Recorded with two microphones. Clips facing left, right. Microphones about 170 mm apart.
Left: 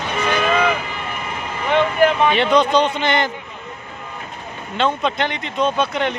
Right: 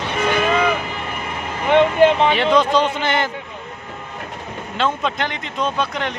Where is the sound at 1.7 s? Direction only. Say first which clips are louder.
Right 3 dB; 25° right (ahead or behind).